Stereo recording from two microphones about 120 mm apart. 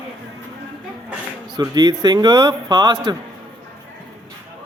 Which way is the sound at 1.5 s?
35° right (ahead or behind).